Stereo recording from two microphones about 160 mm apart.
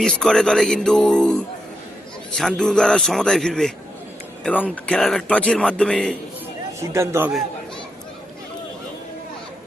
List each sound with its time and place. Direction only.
0.0 s a man's voice: 5° left (ahead or behind)
6.7 s a man's voice: 20° right (ahead or behind)